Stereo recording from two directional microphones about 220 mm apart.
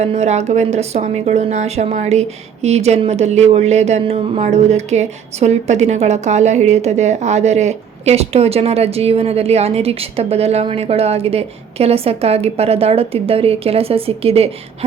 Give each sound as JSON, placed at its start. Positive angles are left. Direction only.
{"t": 0.0, "sound": "speech", "side_deg": -30}